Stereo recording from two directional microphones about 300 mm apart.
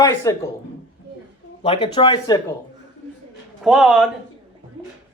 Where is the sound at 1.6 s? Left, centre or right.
Centre.